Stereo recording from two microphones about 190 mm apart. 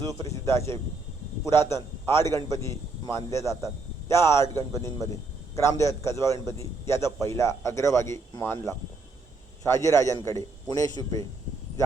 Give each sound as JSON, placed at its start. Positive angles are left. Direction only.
{"t": 0.0, "sound": "a man's voice", "side_deg": 15}